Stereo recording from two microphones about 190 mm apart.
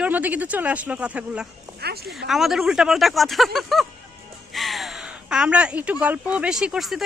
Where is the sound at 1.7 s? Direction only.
55° right (ahead or behind).